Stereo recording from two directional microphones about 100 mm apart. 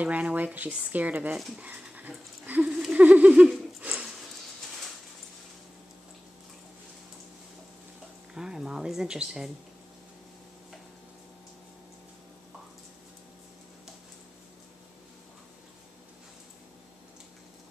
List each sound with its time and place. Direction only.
0.0 s speech: 15° right (ahead or behind)
1.6 s a sound: 15° right (ahead or behind)
8.4 s speech: 5° right (ahead or behind)